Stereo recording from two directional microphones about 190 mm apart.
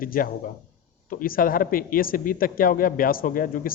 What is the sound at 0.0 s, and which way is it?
Speech, 50° left (ahead or behind).